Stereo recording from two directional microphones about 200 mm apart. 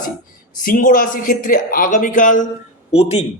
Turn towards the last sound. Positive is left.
turn(degrees=30)  # may be behind; listen again after turning